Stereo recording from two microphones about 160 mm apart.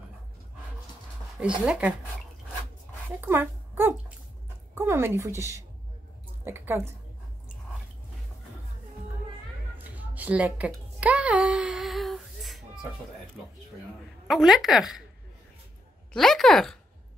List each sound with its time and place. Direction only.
1.7 s speech: 5° right (ahead or behind)
3.2 s a woman's voice: 15° right (ahead or behind)
9.8 s a sound: 10° right (ahead or behind)
14.2 s a woman's voice: centre (ahead or behind)
16.1 s speech: centre (ahead or behind)